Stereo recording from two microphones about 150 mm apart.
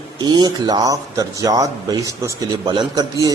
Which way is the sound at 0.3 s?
30° right (ahead or behind).